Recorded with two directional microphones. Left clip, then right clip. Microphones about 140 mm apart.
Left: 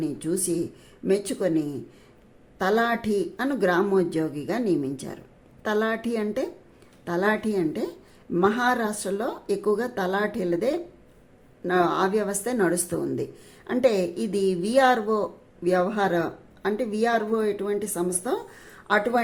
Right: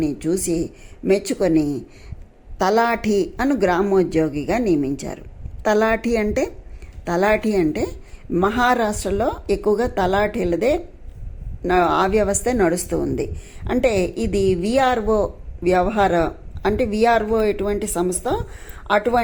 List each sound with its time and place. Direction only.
0.0 s a woman's voice: 25° right (ahead or behind)